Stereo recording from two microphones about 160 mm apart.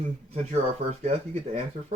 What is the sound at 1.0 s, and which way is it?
Speech, 40° right (ahead or behind).